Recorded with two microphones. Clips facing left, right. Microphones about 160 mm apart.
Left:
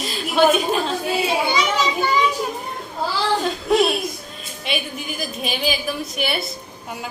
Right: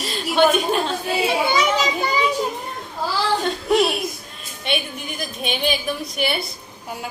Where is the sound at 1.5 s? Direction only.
35° right (ahead or behind).